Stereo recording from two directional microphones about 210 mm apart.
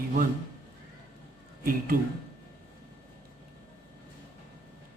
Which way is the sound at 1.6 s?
40° right (ahead or behind).